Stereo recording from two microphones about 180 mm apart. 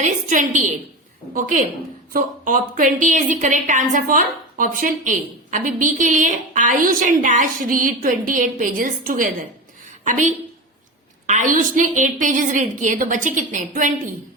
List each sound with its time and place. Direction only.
0.0 s a woman's voice: 45° right (ahead or behind)